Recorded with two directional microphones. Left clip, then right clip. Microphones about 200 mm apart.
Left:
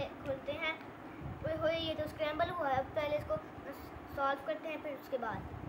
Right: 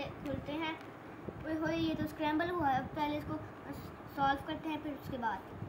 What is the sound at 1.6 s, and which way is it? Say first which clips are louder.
A woman's voice: left 1 dB; 35° left (ahead or behind).